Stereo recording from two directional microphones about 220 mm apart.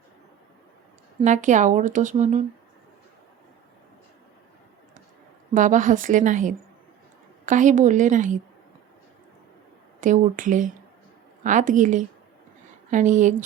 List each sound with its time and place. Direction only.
1.2 s speech: 35° right (ahead or behind)
5.5 s speech: 35° right (ahead or behind)
10.0 s speech: 35° right (ahead or behind)